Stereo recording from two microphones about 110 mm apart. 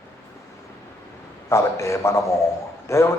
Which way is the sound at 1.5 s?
25° left (ahead or behind).